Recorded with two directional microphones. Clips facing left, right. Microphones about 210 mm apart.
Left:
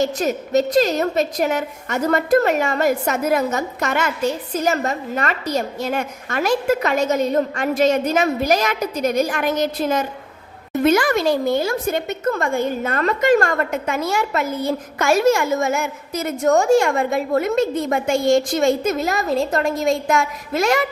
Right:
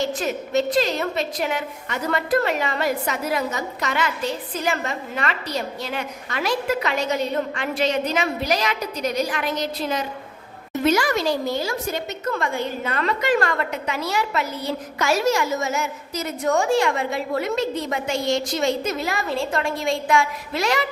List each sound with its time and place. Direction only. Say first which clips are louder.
0.0 s a woman's voice: left 4 dB; 40° left (ahead or behind)